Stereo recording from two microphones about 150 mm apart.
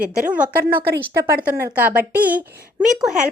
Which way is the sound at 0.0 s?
65° right (ahead or behind).